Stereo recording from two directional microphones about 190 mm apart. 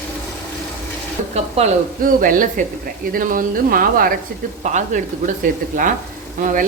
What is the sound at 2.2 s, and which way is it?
Speech, 45° right (ahead or behind).